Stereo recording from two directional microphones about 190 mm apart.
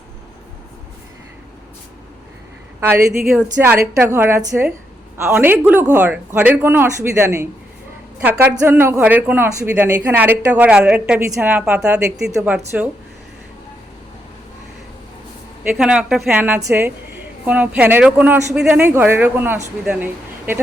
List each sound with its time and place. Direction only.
2.8 s speech: 10° right (ahead or behind)
15.7 s a woman's voice: 5° right (ahead or behind)